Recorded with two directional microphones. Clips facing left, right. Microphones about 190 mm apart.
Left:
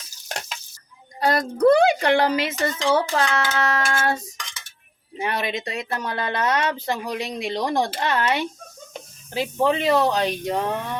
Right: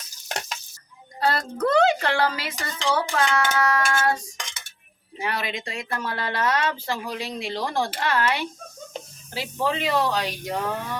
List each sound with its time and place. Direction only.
1.2 s speech: 15° left (ahead or behind)